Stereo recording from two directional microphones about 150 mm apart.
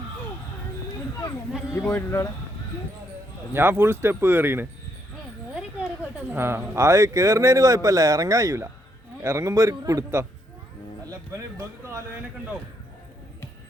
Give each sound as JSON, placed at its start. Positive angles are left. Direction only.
{"t": 1.7, "sound": "speech", "side_deg": 15}
{"t": 3.5, "sound": "speech", "side_deg": -15}
{"t": 6.3, "sound": "speech", "side_deg": -15}
{"t": 11.1, "sound": "music", "side_deg": -25}